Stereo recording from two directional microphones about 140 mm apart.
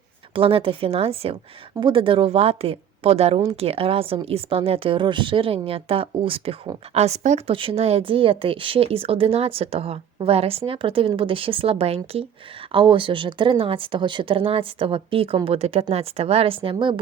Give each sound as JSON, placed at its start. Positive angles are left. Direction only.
{"t": 0.3, "sound": "a woman's voice", "side_deg": -40}